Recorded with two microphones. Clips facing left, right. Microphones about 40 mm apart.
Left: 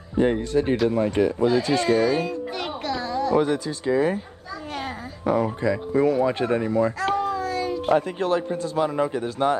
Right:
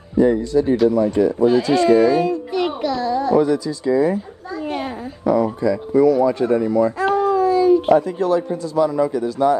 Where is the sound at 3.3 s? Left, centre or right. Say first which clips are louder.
Right 4 dB; left.